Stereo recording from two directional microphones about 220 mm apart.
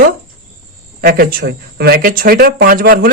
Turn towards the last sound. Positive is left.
turn(degrees=-40)  # may be behind; listen again after turning